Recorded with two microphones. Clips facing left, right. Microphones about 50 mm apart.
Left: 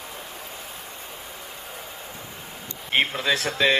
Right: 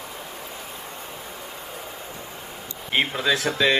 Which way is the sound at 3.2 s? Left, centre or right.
Left.